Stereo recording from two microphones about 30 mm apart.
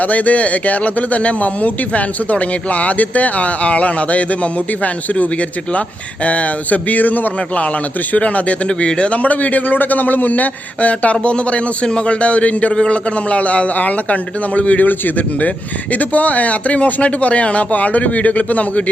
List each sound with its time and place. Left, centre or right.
0.0 s speech: left
8.1 s speech: left
8.6 s speech: left
11.9 s speech: left
14.8 s speech: left